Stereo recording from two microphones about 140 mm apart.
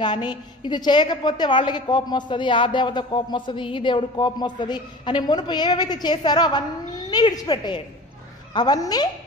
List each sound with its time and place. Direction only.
0.0 s a woman's voice: 35° left (ahead or behind)